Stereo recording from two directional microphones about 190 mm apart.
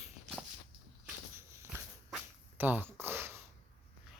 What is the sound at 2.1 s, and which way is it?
Whip, 10° right (ahead or behind).